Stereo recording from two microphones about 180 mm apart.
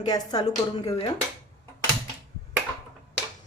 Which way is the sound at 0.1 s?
20° left (ahead or behind).